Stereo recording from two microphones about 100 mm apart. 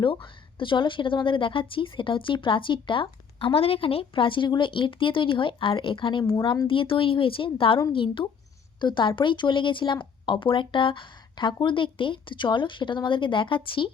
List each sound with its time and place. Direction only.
0.0 s speech: 55° left (ahead or behind)